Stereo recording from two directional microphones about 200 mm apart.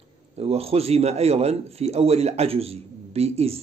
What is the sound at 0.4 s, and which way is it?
Speech, 30° right (ahead or behind).